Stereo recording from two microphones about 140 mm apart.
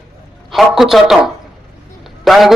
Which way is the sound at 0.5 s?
Centre (ahead or behind).